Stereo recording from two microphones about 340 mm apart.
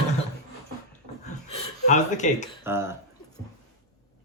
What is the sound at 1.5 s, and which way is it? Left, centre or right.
Speech, left.